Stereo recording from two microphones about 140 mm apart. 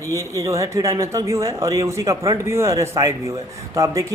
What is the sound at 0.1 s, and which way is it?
A man's voice, 20° right (ahead or behind).